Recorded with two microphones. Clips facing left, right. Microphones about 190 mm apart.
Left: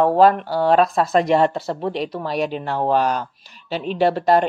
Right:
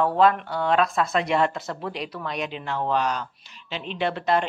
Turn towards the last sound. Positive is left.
turn(degrees=40)  # may be behind; listen again after turning